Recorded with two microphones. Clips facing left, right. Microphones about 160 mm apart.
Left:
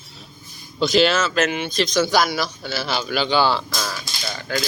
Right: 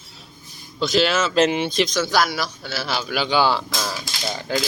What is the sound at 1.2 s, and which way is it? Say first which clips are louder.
Speech: right 3 dB; 25° right (ahead or behind).